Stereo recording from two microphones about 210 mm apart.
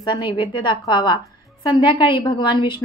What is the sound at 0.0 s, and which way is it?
A woman's voice, 25° left (ahead or behind).